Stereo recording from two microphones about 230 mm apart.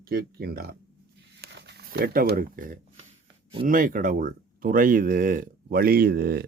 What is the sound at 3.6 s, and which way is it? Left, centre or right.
Speech, right.